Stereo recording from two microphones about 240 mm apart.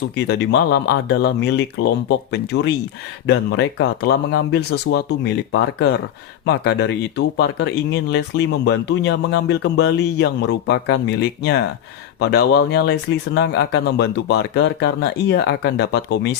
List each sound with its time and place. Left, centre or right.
0.2 s speech: left